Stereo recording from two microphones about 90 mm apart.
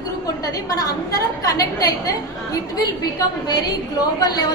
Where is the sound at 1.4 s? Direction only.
40° left (ahead or behind).